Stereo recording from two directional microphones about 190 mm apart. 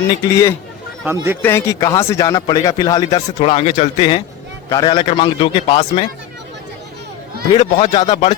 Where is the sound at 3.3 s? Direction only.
30° left (ahead or behind).